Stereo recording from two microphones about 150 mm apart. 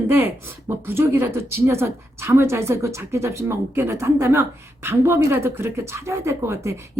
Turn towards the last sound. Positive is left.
turn(degrees=-20)  # may be behind; listen again after turning